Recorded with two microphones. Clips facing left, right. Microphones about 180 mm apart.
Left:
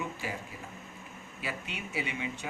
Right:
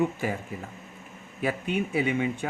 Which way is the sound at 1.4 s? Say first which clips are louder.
Right 12 dB; 50° right (ahead or behind).